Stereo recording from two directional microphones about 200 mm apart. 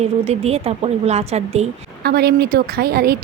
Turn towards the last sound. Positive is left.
turn(degrees=-50)  # may be behind; listen again after turning